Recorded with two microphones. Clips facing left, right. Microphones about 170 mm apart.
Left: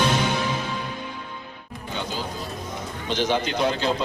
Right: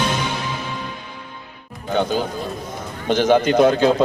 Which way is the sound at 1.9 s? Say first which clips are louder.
Right 11 dB; 55° right (ahead or behind).